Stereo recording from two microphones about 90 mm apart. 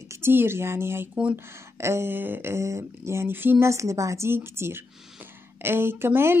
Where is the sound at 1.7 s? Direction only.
30° right (ahead or behind).